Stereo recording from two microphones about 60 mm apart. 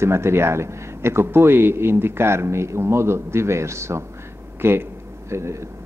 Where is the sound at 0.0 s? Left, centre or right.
Right.